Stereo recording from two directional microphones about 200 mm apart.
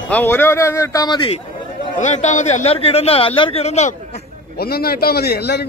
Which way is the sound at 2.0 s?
35° left (ahead or behind).